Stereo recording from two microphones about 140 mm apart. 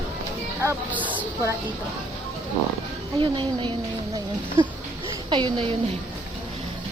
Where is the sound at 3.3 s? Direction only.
35° right (ahead or behind).